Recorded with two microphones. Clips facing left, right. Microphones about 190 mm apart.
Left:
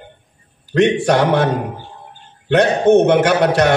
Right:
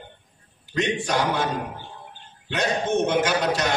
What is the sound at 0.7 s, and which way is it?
A man's voice, 60° left (ahead or behind).